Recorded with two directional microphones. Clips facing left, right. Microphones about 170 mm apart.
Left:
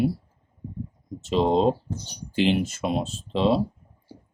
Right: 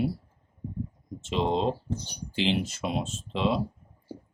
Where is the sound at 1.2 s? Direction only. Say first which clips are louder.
Left 6 dB; 40° left (ahead or behind).